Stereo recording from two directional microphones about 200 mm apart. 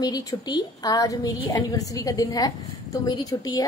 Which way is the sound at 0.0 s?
20° left (ahead or behind).